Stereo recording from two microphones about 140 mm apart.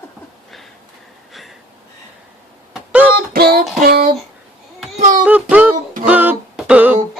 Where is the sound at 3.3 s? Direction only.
90° right.